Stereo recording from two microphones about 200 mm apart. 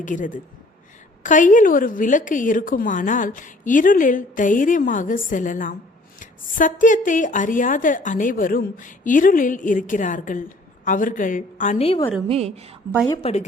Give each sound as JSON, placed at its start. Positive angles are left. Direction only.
{"t": 0.0, "sound": "a woman's voice", "side_deg": 40}
{"t": 12.3, "sound": "a woman's voice", "side_deg": -30}
{"t": 13.1, "sound": "a woman's voice", "side_deg": 30}